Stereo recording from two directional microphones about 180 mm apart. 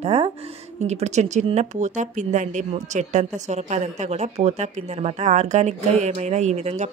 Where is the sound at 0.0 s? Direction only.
35° right (ahead or behind).